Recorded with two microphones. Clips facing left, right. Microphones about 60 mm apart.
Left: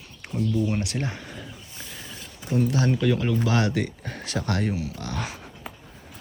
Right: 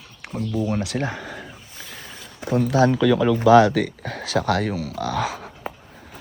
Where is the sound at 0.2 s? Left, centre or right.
Right.